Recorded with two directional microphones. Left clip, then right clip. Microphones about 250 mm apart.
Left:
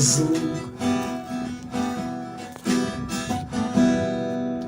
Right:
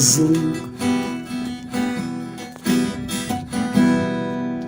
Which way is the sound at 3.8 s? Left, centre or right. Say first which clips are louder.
Right 2 dB; right.